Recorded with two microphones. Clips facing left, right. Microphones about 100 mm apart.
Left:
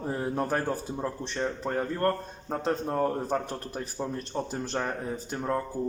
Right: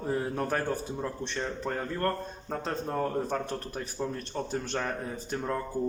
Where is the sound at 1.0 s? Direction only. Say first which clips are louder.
Left 3 dB; 10° left (ahead or behind).